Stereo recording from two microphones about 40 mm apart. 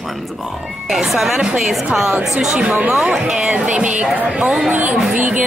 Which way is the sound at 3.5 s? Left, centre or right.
Right.